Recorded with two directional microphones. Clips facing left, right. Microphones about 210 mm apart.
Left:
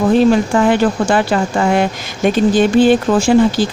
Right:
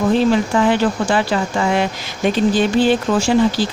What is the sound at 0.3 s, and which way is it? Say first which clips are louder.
Speech: left 3 dB; 50° left (ahead or behind).